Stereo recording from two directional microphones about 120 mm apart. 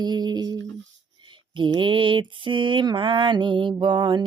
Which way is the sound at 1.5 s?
40° right (ahead or behind).